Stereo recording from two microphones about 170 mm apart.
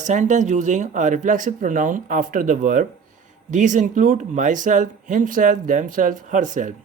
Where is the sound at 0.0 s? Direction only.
45° right (ahead or behind).